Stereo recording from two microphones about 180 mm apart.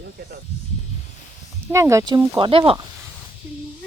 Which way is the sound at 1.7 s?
15° right (ahead or behind).